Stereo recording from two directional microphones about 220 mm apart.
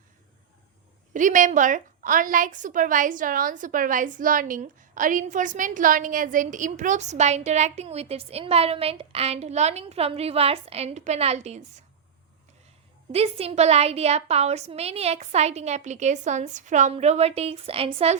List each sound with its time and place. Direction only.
1.1 s a woman's voice: 35° right (ahead or behind)
13.1 s a woman's voice: 25° right (ahead or behind)